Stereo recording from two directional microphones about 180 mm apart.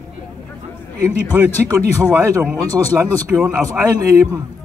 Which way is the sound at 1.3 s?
15° right (ahead or behind).